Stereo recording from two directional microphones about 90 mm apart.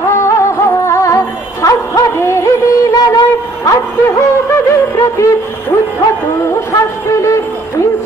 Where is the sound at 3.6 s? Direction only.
35° left (ahead or behind).